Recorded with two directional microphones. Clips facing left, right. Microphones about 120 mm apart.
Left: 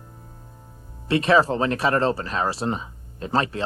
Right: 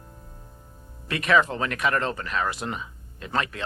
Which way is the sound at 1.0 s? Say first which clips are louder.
Left 4 dB; 30° left (ahead or behind).